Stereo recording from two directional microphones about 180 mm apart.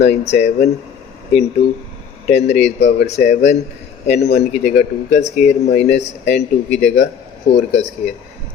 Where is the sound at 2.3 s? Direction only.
35° left (ahead or behind).